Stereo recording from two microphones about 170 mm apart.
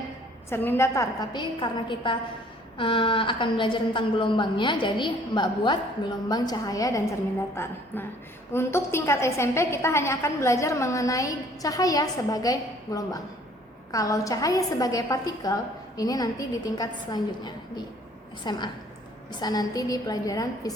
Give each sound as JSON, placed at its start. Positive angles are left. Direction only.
{"t": 0.5, "sound": "a woman's voice", "side_deg": 10}